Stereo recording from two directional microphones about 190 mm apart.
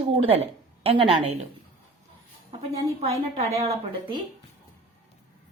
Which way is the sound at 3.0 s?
35° right (ahead or behind).